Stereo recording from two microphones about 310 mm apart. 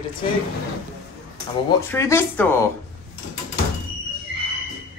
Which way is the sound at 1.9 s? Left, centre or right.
Centre.